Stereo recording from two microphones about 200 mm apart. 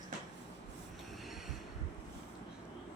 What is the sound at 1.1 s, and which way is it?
Train, centre (ahead or behind).